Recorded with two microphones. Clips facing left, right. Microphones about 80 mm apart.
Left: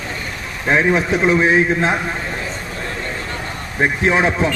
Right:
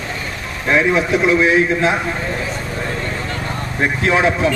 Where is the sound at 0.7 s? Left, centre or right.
Left.